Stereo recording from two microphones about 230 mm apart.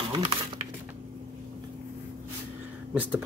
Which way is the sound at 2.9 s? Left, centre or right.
Centre.